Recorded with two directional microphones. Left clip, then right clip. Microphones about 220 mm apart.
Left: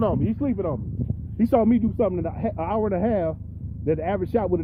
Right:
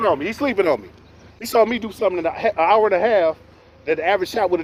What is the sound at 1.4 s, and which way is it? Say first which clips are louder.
Speech: right 3 dB; 5° right (ahead or behind).